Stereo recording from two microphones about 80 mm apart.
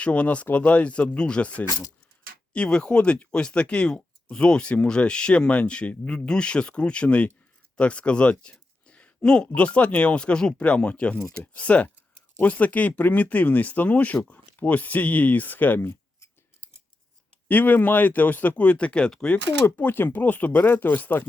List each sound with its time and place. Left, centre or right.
0.0 s speech: centre
17.5 s speech: left
19.6 s speech: left